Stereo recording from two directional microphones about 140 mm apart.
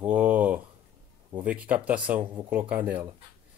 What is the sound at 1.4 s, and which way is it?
Speech, 10° right (ahead or behind).